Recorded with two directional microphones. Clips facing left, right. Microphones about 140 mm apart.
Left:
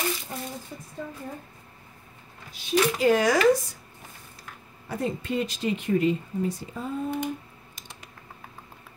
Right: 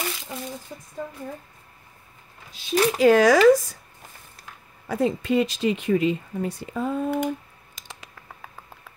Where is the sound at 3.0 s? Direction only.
90° right.